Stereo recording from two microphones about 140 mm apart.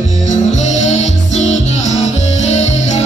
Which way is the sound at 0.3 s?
55° left (ahead or behind).